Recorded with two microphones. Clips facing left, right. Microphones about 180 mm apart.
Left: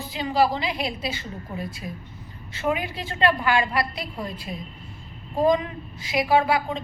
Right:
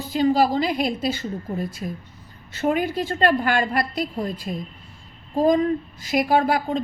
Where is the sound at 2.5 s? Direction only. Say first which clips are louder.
Right 5 dB; 45° right (ahead or behind).